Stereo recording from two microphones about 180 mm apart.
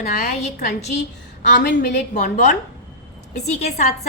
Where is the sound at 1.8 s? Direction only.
45° left (ahead or behind).